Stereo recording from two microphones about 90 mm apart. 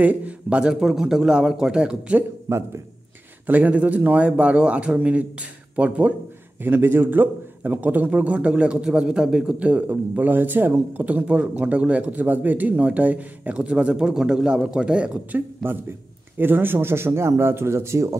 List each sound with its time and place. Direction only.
0.0 s a man's voice: 15° right (ahead or behind)
2.5 s a man's voice: 30° right (ahead or behind)
3.4 s a man's voice: 20° right (ahead or behind)
15.6 s speech: 25° right (ahead or behind)